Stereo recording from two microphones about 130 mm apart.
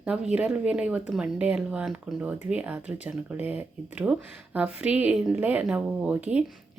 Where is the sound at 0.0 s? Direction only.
10° right (ahead or behind).